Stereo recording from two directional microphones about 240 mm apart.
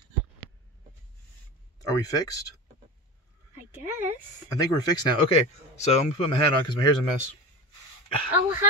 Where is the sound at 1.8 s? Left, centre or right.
Centre.